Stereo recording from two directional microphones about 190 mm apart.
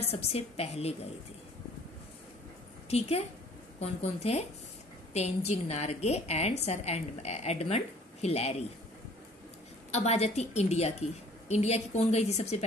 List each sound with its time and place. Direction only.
0.0 s a woman's voice: 30° left (ahead or behind)
2.9 s a woman's voice: 30° left (ahead or behind)
9.8 s a woman's voice: 35° left (ahead or behind)